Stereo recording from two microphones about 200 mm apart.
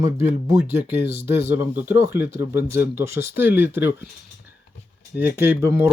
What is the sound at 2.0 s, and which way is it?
Speech, 10° right (ahead or behind).